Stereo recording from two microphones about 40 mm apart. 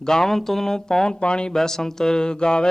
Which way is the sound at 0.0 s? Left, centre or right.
Centre.